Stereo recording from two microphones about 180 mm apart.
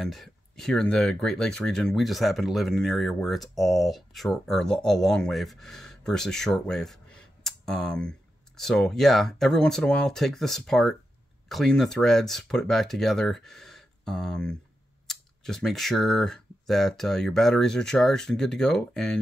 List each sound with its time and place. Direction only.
0.0 s speech: centre (ahead or behind)